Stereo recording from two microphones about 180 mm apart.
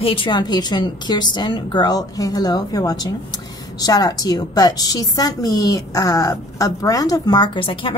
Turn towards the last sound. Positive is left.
turn(degrees=30)  # may be behind; listen again after turning